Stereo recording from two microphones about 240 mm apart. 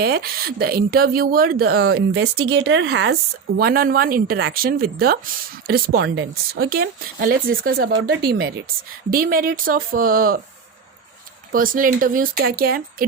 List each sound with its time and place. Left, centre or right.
0.0 s speech: right
2.4 s speech: right
2.6 s speech: right
11.5 s speech: right